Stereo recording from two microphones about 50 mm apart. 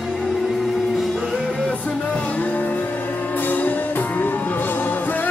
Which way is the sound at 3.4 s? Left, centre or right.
Left.